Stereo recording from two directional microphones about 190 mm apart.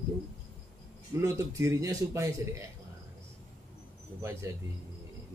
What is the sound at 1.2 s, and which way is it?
A man's voice, 15° right (ahead or behind).